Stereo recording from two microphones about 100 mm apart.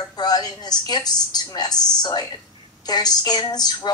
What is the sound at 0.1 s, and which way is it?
A woman's voice, 40° left (ahead or behind).